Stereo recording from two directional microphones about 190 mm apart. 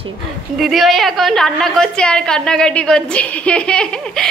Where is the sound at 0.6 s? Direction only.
Centre (ahead or behind).